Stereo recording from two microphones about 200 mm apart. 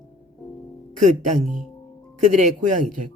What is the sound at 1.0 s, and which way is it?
Speech, 40° right (ahead or behind).